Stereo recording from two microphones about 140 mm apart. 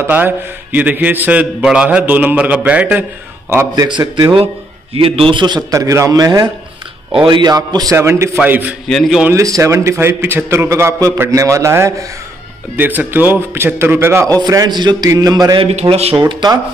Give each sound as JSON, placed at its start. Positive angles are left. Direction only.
{"t": 0.0, "sound": "a man's voice", "side_deg": -15}
{"t": 3.5, "sound": "a man's voice", "side_deg": -25}
{"t": 5.7, "sound": "a man's voice", "side_deg": -20}
{"t": 8.8, "sound": "a man's voice", "side_deg": 5}
{"t": 9.2, "sound": "a man's voice", "side_deg": -20}
{"t": 14.4, "sound": "a man's voice", "side_deg": -30}
{"t": 15.6, "sound": "speech", "side_deg": -45}